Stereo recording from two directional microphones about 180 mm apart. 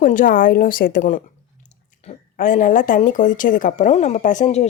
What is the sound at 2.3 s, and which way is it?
Speech, 45° left (ahead or behind).